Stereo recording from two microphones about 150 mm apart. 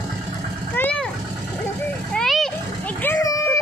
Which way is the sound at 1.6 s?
5° left (ahead or behind).